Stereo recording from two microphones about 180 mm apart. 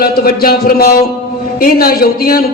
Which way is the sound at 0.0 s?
55° left (ahead or behind).